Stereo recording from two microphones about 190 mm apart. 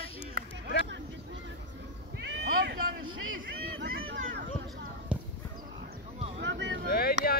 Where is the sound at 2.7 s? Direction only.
90° right.